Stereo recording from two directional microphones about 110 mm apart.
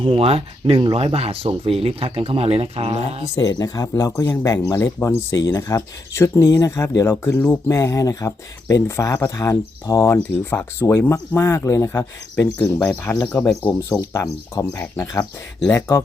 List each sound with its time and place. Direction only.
0.0 s speech: 60° right (ahead or behind)
3.3 s speech: 35° left (ahead or behind)
12.5 s speech: 15° left (ahead or behind)
13.4 s speech: 25° left (ahead or behind)